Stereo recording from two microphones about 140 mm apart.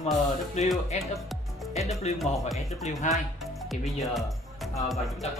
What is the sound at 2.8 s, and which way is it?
Speech, 55° left (ahead or behind).